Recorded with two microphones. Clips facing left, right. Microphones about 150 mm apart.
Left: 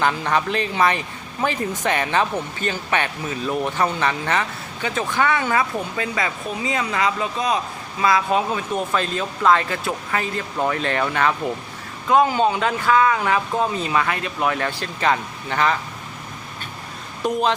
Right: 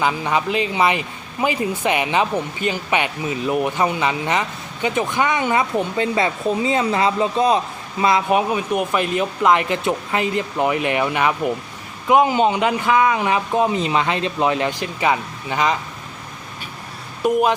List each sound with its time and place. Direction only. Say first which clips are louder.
0.0 s a man's voice: right 1 dB; 10° right (ahead or behind)